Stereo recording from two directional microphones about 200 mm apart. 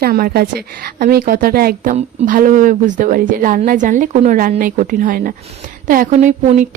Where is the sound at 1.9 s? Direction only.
30° right (ahead or behind).